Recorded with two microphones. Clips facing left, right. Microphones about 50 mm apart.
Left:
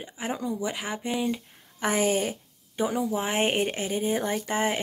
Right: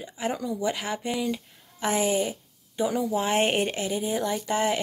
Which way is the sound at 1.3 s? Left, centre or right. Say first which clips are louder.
Even; left.